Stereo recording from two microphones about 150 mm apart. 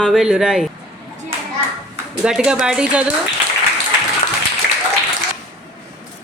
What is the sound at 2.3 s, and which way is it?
Speech, 5° right (ahead or behind).